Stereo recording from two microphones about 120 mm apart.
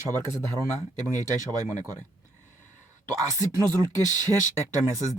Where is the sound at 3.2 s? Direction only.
25° right (ahead or behind).